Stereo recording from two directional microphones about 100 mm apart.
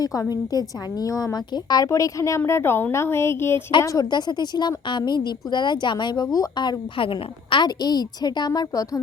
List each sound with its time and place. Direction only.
0.0 s a woman's voice: 35° left (ahead or behind)
3.8 s a woman's voice: 40° left (ahead or behind)
6.2 s a woman's voice: 40° left (ahead or behind)